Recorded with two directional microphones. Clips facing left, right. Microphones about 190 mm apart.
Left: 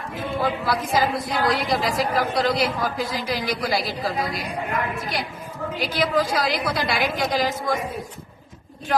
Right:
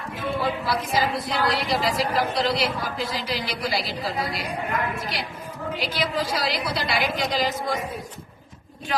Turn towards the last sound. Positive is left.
turn(degrees=50)  # may be behind; listen again after turning